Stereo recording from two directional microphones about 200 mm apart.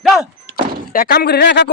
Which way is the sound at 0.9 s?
50° left (ahead or behind).